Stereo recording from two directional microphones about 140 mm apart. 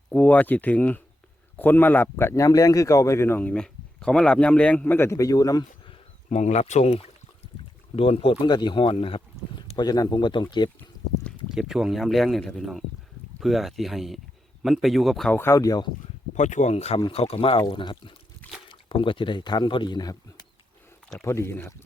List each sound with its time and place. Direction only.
0.1 s a man's voice: 10° left (ahead or behind)
6.2 s speech: 55° left (ahead or behind); by 10.7 s 30° left (ahead or behind)
10.8 s pour: 10° left (ahead or behind)
11.5 s speech: 5° right (ahead or behind)
15.3 s speech: 15° left (ahead or behind)
16.3 s speech: 60° left (ahead or behind); by 20.1 s 30° left (ahead or behind)
21.2 s speech: 20° left (ahead or behind)